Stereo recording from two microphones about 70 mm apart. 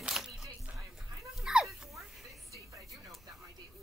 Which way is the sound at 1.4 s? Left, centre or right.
Centre.